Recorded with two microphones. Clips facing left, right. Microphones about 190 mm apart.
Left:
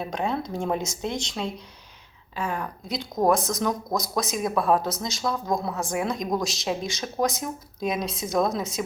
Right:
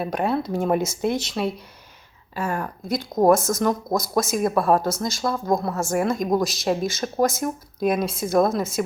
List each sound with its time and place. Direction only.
0.0 s speech: 5° right (ahead or behind)